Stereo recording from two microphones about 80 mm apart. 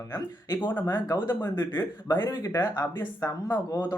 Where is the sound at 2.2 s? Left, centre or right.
Left.